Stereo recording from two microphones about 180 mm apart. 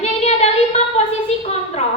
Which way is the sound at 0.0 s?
35° left (ahead or behind).